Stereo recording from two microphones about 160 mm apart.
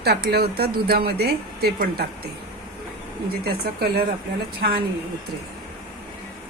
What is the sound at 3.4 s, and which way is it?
Speech, 75° right (ahead or behind).